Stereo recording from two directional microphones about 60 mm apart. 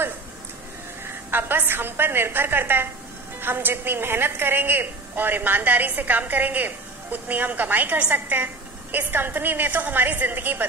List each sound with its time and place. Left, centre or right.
1.0 s a woman's voice: right